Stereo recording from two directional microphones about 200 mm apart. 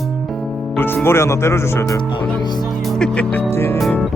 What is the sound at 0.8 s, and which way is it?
Speech, 10° left (ahead or behind).